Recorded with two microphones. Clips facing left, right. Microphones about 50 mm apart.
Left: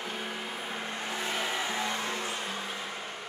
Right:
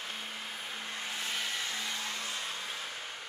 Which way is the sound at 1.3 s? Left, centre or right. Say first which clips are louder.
Left 6 dB; centre.